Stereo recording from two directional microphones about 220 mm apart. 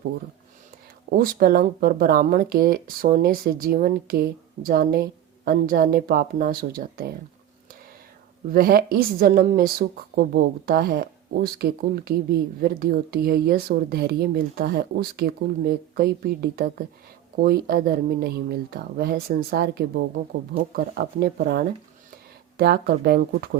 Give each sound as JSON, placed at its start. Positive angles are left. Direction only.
{"t": 1.2, "sound": "a woman's voice", "side_deg": -40}
{"t": 8.5, "sound": "a woman's voice", "side_deg": -40}